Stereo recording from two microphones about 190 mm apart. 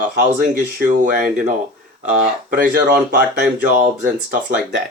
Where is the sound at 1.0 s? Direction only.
45° right (ahead or behind).